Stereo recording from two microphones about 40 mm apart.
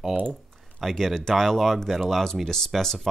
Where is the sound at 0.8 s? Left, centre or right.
Centre.